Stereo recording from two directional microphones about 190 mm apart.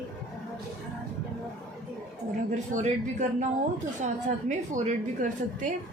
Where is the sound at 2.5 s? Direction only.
40° right (ahead or behind).